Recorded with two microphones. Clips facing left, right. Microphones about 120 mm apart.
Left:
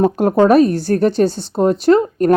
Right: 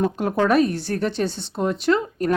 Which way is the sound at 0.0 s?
45° left (ahead or behind).